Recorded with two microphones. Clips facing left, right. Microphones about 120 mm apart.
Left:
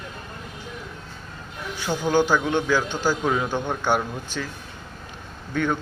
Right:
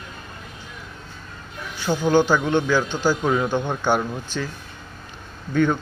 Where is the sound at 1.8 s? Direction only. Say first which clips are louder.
Right 3 dB; 5° left (ahead or behind).